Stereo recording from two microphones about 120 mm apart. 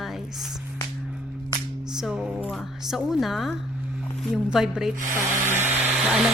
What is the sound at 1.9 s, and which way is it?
Speech, 5° right (ahead or behind).